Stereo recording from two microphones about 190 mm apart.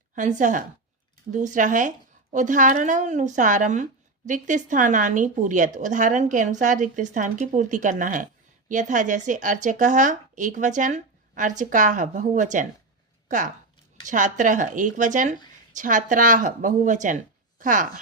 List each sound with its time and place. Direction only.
0.2 s a woman's voice: 40° right (ahead or behind)